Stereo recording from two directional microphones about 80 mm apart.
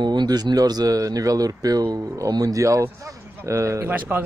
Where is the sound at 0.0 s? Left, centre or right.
Right.